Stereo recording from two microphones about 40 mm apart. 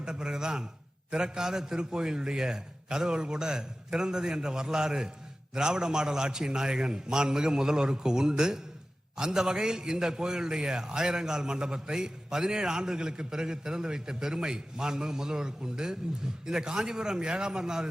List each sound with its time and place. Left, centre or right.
0.0 s a man's voice: centre